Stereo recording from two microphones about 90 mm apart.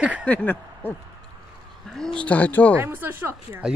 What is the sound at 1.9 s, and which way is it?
Speech, 5° left (ahead or behind).